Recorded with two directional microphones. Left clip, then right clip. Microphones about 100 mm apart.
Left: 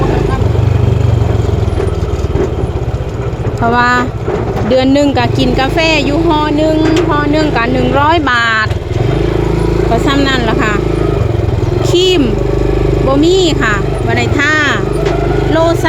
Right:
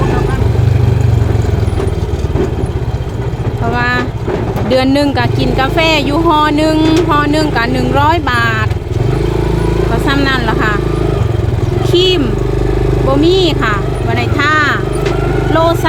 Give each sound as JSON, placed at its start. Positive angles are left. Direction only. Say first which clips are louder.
{"t": 3.7, "sound": "speech", "louder": "left 4 dB", "side_deg": 25}
{"t": 4.7, "sound": "speech", "louder": "left 2 dB", "side_deg": 0}
{"t": 5.9, "sound": "speech", "louder": "left 1 dB", "side_deg": -5}
{"t": 6.2, "sound": "music", "louder": "right 1 dB", "side_deg": -20}
{"t": 7.5, "sound": "speech", "louder": "left 1 dB", "side_deg": -5}
{"t": 8.2, "sound": "speech", "louder": "left 3 dB", "side_deg": 15}
{"t": 10.2, "sound": "speech", "louder": "left 1 dB", "side_deg": 5}
{"t": 11.8, "sound": "speech", "louder": "left 1 dB", "side_deg": 15}